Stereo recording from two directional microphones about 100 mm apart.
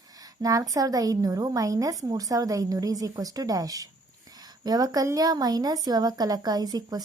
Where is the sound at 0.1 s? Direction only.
40° right (ahead or behind).